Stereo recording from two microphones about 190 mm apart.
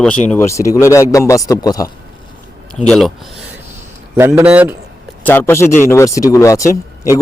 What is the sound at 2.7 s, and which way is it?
Speech, centre (ahead or behind).